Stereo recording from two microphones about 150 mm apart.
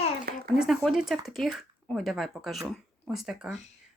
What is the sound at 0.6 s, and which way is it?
Speech, centre (ahead or behind).